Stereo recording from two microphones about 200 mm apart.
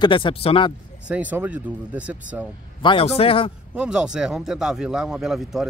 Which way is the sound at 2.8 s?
25° left (ahead or behind).